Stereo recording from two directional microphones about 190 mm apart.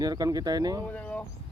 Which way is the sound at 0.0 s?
20° right (ahead or behind).